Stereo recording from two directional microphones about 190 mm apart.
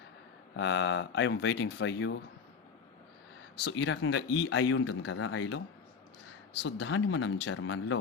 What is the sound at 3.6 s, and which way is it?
Speech, 70° left (ahead or behind).